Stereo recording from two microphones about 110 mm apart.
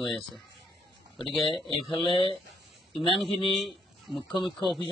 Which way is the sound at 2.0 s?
50° left (ahead or behind).